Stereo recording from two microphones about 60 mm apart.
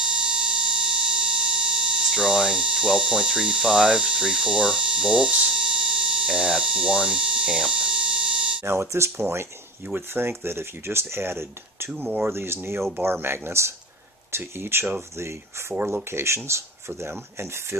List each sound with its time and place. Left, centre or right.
0.0 s a sound: centre
8.6 s speech: right
9.8 s speech: right